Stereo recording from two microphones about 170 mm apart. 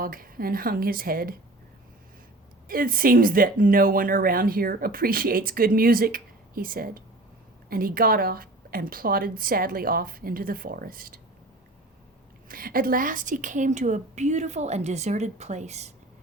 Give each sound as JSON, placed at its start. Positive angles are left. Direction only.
{"t": 0.0, "sound": "speech", "side_deg": -55}
{"t": 2.6, "sound": "speech", "side_deg": -55}
{"t": 12.5, "sound": "a woman's voice", "side_deg": -55}